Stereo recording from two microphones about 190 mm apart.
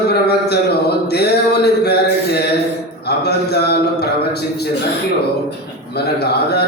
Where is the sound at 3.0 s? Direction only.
60° left (ahead or behind).